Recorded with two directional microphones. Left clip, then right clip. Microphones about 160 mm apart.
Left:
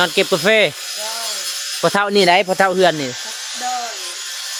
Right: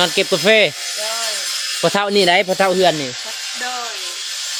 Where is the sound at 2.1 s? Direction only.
10° left (ahead or behind).